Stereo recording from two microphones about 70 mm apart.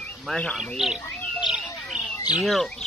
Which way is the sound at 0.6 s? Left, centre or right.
Centre.